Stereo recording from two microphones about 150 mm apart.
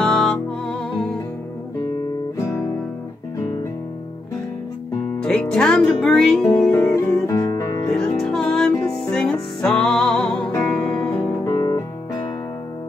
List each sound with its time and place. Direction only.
0.0 s music: 5° left (ahead or behind)
5.2 s music: 5° left (ahead or behind); by 7.9 s 25° left (ahead or behind)
7.9 s music: 5° left (ahead or behind)
11.5 s guitar: 25° left (ahead or behind)